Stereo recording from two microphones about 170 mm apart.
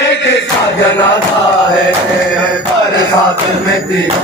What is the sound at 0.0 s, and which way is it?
Chant, 90° left.